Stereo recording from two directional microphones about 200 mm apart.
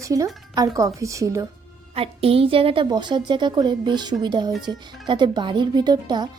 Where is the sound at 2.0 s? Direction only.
30° right (ahead or behind).